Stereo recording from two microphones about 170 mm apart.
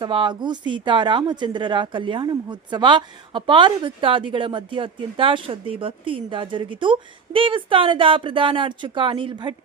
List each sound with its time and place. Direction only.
0.0 s speech: 30° right (ahead or behind)